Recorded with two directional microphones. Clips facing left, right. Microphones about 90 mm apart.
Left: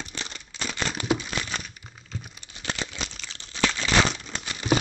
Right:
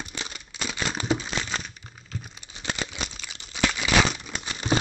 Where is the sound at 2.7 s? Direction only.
15° right (ahead or behind).